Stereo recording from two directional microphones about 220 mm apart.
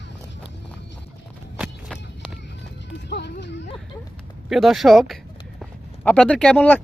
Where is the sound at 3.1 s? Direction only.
50° left (ahead or behind).